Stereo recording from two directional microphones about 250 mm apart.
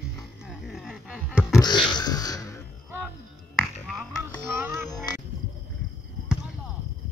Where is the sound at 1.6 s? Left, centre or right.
Centre.